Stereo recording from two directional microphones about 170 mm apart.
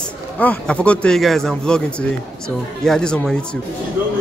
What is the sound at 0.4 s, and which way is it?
A man's voice, 10° left (ahead or behind).